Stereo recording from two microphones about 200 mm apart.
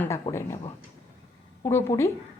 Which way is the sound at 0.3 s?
20° left (ahead or behind).